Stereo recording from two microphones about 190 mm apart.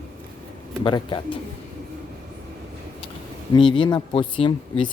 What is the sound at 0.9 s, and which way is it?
Speech, 25° left (ahead or behind).